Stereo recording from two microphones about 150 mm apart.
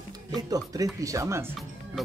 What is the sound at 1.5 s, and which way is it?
Music, centre (ahead or behind).